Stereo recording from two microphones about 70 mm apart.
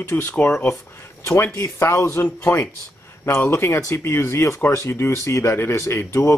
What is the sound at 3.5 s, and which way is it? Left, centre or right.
Speech, left.